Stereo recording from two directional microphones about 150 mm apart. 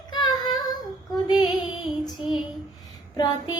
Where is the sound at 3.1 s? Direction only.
30° left (ahead or behind).